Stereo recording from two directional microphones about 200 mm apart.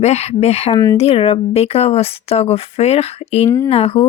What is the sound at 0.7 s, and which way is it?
Speech, 15° left (ahead or behind).